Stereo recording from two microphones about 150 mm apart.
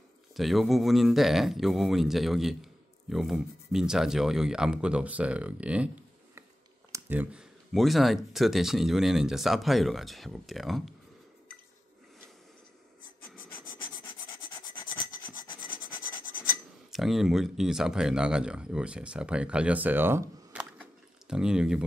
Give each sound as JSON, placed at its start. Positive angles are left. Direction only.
{"t": 0.3, "sound": "speech", "side_deg": 0}
{"t": 6.9, "sound": "a sound", "side_deg": -10}
{"t": 7.7, "sound": "speech", "side_deg": 0}
{"t": 14.8, "sound": "rub", "side_deg": 30}
{"t": 16.9, "sound": "speech", "side_deg": 0}
{"t": 20.7, "sound": "a sound", "side_deg": -5}